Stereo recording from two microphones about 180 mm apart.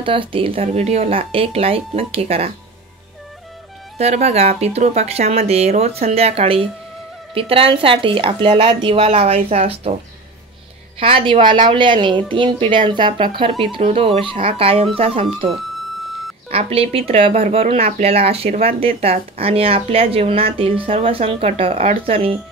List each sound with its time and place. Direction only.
0.0 s speech: 30° right (ahead or behind)
4.0 s speech: 35° right (ahead or behind)
11.0 s a woman's voice: 30° right (ahead or behind)